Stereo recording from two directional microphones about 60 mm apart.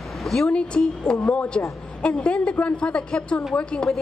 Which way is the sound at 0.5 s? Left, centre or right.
Centre.